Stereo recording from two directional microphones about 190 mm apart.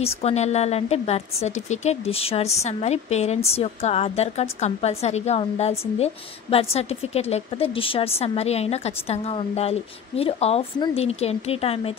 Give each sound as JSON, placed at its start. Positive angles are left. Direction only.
{"t": 0.0, "sound": "a woman's voice", "side_deg": 35}